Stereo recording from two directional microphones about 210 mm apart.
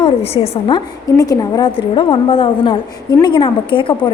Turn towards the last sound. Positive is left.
turn(degrees=25)  # may be behind; listen again after turning